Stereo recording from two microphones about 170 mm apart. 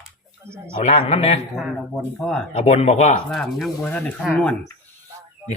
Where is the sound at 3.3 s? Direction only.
Centre (ahead or behind).